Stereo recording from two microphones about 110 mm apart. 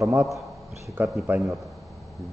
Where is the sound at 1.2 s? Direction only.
20° right (ahead or behind).